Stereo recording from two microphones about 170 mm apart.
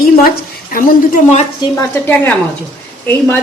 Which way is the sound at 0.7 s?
60° left (ahead or behind).